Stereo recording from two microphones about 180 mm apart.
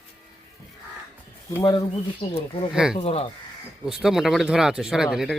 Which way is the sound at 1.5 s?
15° left (ahead or behind).